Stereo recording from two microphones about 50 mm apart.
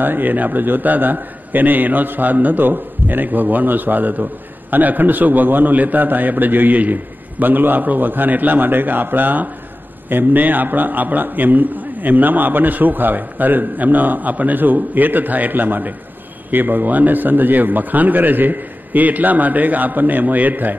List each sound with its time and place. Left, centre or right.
0.0 s a man's voice: right